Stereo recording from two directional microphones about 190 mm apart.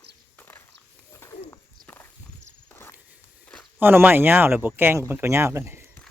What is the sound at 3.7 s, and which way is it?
Speech, 10° right (ahead or behind).